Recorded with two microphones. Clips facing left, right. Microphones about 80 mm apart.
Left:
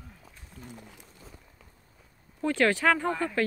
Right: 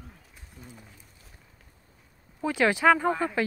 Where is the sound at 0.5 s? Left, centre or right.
Centre.